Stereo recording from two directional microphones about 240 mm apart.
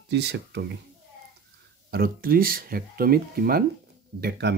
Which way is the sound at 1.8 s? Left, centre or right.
Right.